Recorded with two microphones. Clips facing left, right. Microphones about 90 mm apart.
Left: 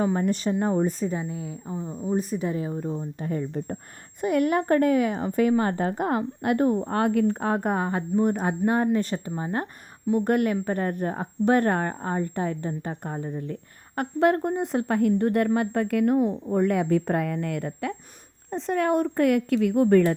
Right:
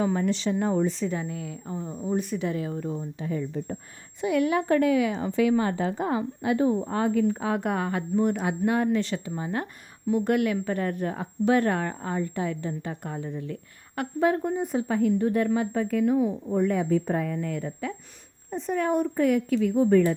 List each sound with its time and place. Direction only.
0.0 s speech: 35° left (ahead or behind)
0.3 s a woman's voice: 45° left (ahead or behind)
0.6 s speech: 35° left (ahead or behind)
1.1 s speech: 25° left (ahead or behind)
1.6 s speech: 10° left (ahead or behind)
2.1 s speech: 35° left (ahead or behind)
3.2 s a woman's voice: 45° left (ahead or behind)
7.5 s speech: 35° left (ahead or behind)
11.4 s a woman's voice: 50° left (ahead or behind)
14.2 s speech: 60° left (ahead or behind)
14.6 s speech: 70° left (ahead or behind)
16.6 s speech: 75° left (ahead or behind)
18.5 s speech: 85° left